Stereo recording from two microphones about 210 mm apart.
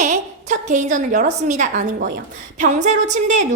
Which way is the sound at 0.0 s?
35° right (ahead or behind).